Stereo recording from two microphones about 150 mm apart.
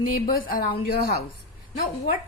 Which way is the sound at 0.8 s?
90° left.